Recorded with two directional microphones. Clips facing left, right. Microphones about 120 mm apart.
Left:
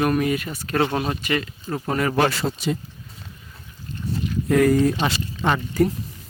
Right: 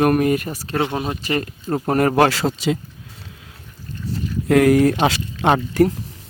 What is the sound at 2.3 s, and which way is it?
Speech, 90° right.